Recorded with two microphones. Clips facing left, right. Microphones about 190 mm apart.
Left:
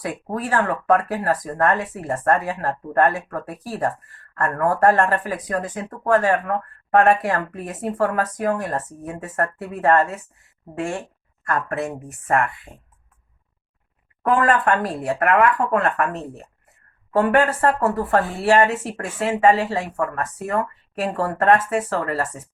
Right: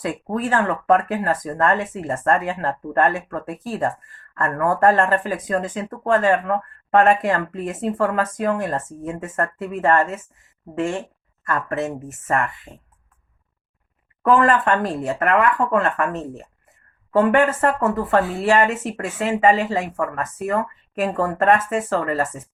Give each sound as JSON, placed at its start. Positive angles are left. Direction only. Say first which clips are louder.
{"t": 0.0, "sound": "speech", "louder": "right 3 dB", "side_deg": -20}
{"t": 14.4, "sound": "speech", "louder": "right 1 dB", "side_deg": -20}